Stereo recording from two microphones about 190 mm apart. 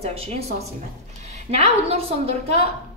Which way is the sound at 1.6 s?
35° right (ahead or behind).